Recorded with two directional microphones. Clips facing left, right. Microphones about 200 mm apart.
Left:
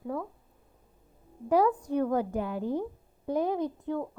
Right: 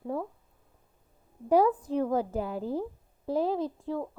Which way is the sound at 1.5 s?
5° right (ahead or behind).